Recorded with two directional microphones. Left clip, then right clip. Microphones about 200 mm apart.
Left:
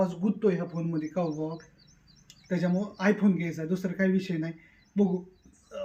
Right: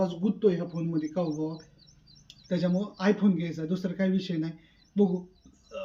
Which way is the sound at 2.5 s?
Centre (ahead or behind).